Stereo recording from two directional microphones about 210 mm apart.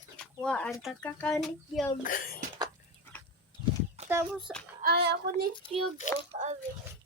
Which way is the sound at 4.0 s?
30° right (ahead or behind).